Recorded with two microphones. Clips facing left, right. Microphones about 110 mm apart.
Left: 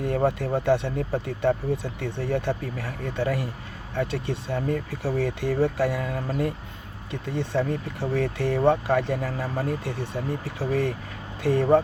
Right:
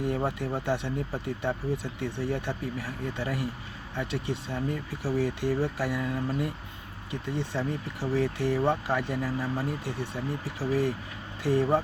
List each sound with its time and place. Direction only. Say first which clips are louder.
0.3 s speech: left 7 dB; 50° left (ahead or behind)